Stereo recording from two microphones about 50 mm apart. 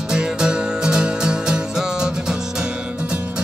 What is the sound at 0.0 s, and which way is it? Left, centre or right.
Music, centre.